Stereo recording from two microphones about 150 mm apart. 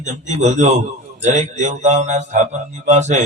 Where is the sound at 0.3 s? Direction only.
50° right (ahead or behind).